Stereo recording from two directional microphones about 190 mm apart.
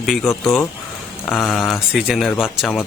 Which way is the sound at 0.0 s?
Centre (ahead or behind).